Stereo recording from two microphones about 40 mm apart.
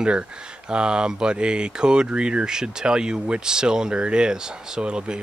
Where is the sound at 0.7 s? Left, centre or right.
Right.